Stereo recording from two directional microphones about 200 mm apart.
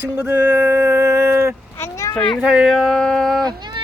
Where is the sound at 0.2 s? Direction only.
10° right (ahead or behind).